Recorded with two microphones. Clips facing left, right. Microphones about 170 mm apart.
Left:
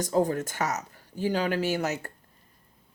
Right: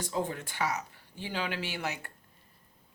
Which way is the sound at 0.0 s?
40° left (ahead or behind).